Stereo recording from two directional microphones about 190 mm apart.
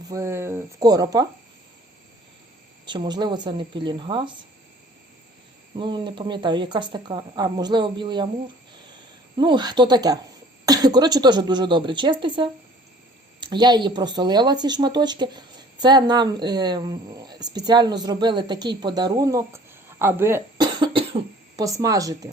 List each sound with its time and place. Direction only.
0.1 s speech: 15° right (ahead or behind)
2.8 s speech: 25° right (ahead or behind)
5.7 s speech: 25° right (ahead or behind)
9.4 s speech: 25° right (ahead or behind)
20.6 s cough: 25° right (ahead or behind)
21.6 s speech: 15° right (ahead or behind)